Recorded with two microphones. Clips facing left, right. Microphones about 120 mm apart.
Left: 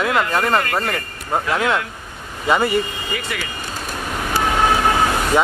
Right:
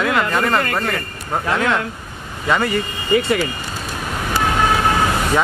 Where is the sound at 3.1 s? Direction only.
30° right (ahead or behind).